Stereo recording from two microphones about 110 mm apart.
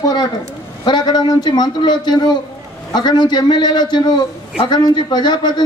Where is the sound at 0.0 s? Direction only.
35° left (ahead or behind).